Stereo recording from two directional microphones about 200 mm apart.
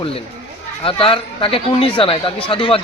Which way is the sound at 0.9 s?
25° left (ahead or behind).